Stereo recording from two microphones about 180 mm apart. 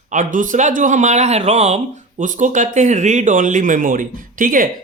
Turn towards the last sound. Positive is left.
turn(degrees=-50)  # may be behind; listen again after turning